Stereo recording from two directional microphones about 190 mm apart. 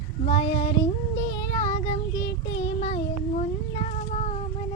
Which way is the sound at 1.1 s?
20° left (ahead or behind).